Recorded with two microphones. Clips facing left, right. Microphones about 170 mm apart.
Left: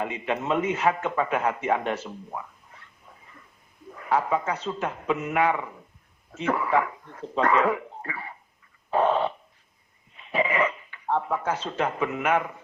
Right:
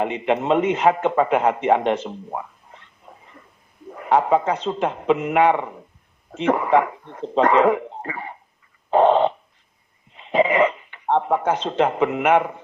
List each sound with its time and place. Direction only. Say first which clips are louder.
0.0 s a man's voice: right 7 dB; 30° right (ahead or behind)
3.9 s a man's voice: right 7 dB; 30° right (ahead or behind)
8.9 s a sound: right 7 dB; 30° right (ahead or behind)
10.2 s dog: right 7 dB; 25° right (ahead or behind)
11.2 s a man's voice: right 7 dB; 25° right (ahead or behind)